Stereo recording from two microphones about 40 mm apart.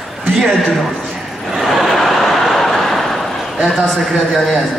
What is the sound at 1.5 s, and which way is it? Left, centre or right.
Vehicle, centre.